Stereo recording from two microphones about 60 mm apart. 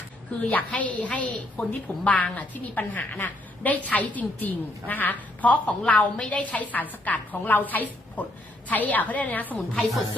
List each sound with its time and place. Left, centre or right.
0.7 s a woman's voice: left
9.6 s speech: centre